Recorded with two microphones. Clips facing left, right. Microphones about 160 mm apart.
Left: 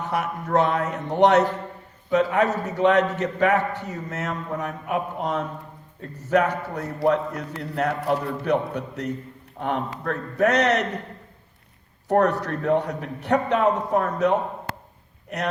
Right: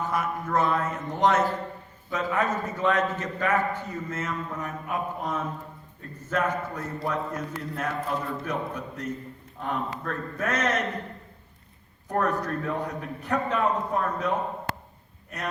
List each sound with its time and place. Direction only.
0.0 s a man's voice: 70° left (ahead or behind)
12.0 s a man's voice: 75° left (ahead or behind)